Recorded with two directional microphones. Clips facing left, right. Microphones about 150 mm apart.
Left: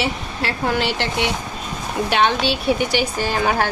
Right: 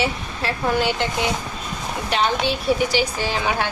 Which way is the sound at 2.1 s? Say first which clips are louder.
Left 2 dB; 75° left (ahead or behind).